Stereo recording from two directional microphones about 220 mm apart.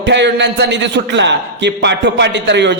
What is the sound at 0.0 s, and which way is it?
A man's voice, 55° right (ahead or behind).